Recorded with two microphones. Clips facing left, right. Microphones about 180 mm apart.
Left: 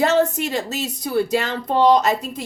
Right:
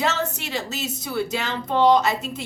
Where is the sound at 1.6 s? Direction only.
40° left (ahead or behind).